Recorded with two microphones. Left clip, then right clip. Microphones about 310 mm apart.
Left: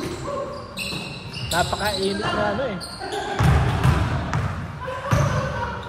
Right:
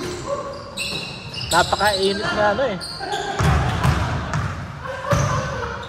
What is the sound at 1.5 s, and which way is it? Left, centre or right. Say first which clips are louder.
Speech: right 5 dB; right.